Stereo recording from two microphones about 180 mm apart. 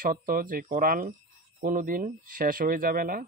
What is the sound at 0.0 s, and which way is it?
Speech, 50° right (ahead or behind).